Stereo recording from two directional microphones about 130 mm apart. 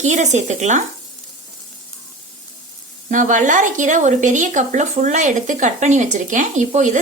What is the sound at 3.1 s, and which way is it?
A woman's voice, 80° right.